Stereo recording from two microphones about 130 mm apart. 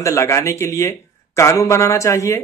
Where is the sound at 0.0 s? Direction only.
20° left (ahead or behind).